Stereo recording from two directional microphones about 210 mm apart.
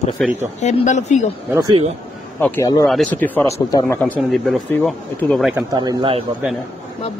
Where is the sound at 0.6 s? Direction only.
35° left (ahead or behind).